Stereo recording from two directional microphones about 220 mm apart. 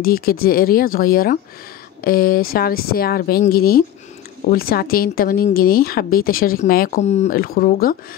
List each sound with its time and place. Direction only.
0.0 s speech: 40° left (ahead or behind)